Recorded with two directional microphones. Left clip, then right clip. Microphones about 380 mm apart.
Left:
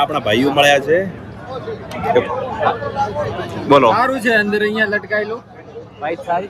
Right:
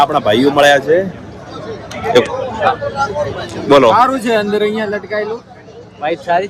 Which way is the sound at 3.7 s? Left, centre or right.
Centre.